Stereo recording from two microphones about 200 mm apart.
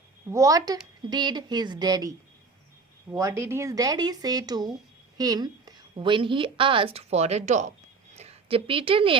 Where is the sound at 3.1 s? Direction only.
15° right (ahead or behind).